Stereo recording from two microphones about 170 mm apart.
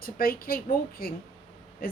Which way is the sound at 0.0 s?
60° left (ahead or behind).